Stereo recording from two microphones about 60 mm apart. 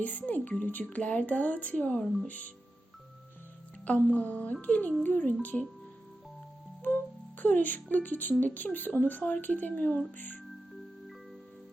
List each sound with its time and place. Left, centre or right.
0.0 s speech: left
3.8 s speech: left
6.8 s speech: left